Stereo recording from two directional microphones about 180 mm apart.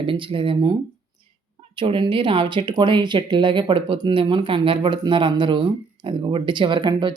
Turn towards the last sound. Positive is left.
turn(degrees=-25)  # may be behind; listen again after turning